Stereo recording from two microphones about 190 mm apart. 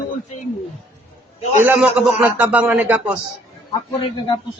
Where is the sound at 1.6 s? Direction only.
10° right (ahead or behind).